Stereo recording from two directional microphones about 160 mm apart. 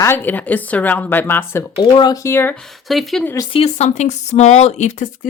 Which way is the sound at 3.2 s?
20° left (ahead or behind).